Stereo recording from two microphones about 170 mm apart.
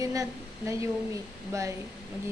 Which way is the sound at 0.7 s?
15° right (ahead or behind).